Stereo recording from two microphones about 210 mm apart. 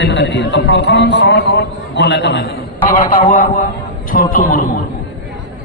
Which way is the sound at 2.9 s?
45° left (ahead or behind).